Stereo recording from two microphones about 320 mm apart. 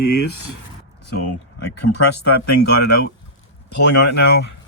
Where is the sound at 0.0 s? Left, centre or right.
Left.